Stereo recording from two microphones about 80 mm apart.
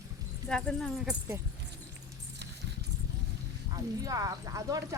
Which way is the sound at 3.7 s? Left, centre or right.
Right.